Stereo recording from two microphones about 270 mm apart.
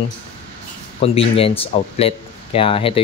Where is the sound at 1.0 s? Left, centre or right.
Left.